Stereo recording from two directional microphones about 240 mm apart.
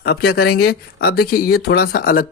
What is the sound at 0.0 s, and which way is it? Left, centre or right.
Speech, left.